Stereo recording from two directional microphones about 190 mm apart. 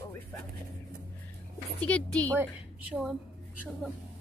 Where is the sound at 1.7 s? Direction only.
5° left (ahead or behind).